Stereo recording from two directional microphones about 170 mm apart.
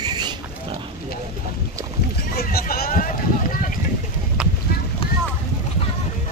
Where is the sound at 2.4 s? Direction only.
65° left (ahead or behind).